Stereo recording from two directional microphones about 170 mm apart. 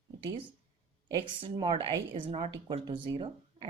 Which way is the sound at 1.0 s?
25° right (ahead or behind).